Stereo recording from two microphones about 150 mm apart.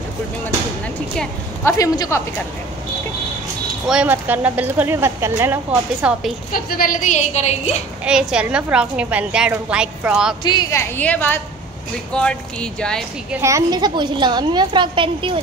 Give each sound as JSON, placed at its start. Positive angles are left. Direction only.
{"t": 1.6, "sound": "speech", "side_deg": 20}
{"t": 3.8, "sound": "speech", "side_deg": -5}
{"t": 6.5, "sound": "a woman's voice", "side_deg": 70}
{"t": 8.0, "sound": "speech", "side_deg": -5}
{"t": 10.4, "sound": "speech", "side_deg": 30}
{"t": 10.7, "sound": "speech", "side_deg": 10}
{"t": 13.4, "sound": "a woman's voice", "side_deg": -20}